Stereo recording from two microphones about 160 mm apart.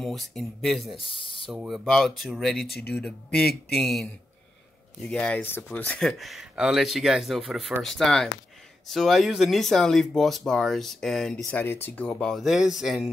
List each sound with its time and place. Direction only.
0.0 s speech: centre (ahead or behind)
0.9 s speech: 35° left (ahead or behind)
1.5 s speech: centre (ahead or behind)